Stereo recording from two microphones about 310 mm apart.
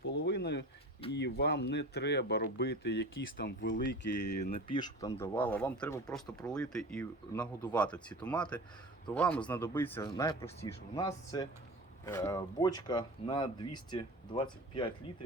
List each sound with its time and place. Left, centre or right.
0.1 s a sound: left
1.1 s speech: left
4.7 s speech: centre